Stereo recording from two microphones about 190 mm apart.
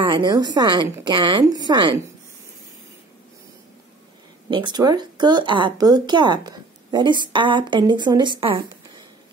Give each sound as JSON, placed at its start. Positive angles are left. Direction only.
{"t": 0.0, "sound": "speech", "side_deg": -25}
{"t": 4.5, "sound": "speech", "side_deg": -25}